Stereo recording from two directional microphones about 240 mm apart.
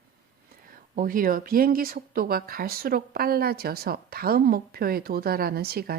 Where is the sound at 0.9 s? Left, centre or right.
Right.